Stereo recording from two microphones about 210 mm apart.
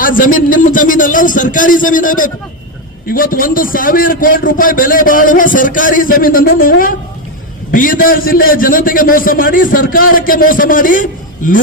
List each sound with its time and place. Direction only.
0.0 s a man's voice: 40° left (ahead or behind)